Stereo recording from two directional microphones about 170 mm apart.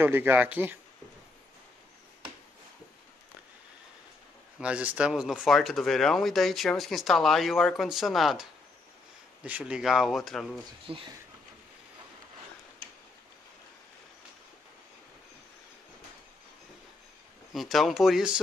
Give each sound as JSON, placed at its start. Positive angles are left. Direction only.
{"t": 0.0, "sound": "speech", "side_deg": -10}
{"t": 4.6, "sound": "speech", "side_deg": -5}
{"t": 10.9, "sound": "speech", "side_deg": -30}
{"t": 17.5, "sound": "speech", "side_deg": 0}